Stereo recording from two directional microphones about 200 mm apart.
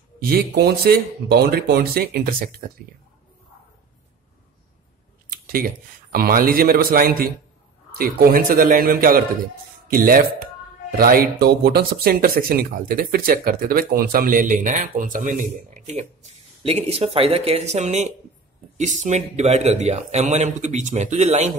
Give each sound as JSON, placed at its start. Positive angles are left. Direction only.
{"t": 0.2, "sound": "speech", "side_deg": -50}
{"t": 5.3, "sound": "a sound", "side_deg": -45}
{"t": 6.1, "sound": "speech", "side_deg": -45}